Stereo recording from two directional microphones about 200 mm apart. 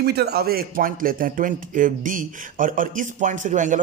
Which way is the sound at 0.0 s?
55° right (ahead or behind).